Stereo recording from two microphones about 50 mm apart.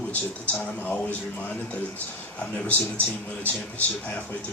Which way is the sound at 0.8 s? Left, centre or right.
Left.